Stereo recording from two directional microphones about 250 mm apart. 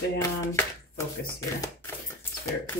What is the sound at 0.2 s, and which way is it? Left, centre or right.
Speech, centre.